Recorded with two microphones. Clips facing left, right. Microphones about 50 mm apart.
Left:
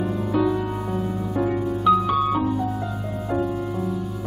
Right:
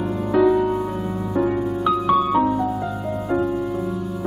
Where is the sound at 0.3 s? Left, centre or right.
Centre.